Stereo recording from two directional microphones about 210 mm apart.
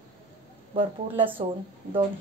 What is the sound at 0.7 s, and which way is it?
Speech, 25° right (ahead or behind).